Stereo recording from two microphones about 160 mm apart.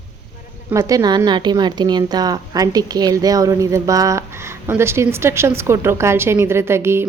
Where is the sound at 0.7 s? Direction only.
20° right (ahead or behind).